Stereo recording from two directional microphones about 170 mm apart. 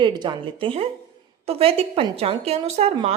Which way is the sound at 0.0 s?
25° right (ahead or behind).